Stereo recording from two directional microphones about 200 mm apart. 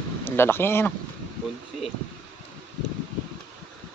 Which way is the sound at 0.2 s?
10° left (ahead or behind).